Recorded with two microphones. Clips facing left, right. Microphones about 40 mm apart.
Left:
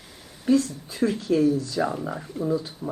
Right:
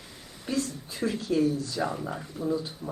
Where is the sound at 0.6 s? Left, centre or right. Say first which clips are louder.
Left 6 dB; left.